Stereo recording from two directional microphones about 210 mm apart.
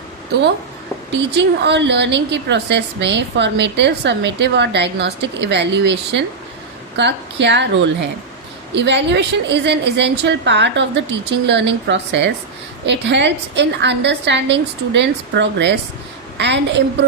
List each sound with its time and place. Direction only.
0.3 s a woman's voice: 50° right (ahead or behind)